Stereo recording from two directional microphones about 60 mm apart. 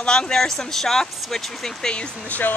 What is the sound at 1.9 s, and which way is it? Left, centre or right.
Speech, left.